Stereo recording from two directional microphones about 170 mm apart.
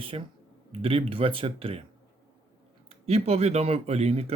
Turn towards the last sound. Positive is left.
turn(degrees=-35)  # may be behind; listen again after turning